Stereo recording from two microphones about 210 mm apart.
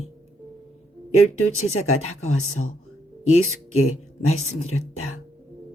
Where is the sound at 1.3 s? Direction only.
85° left.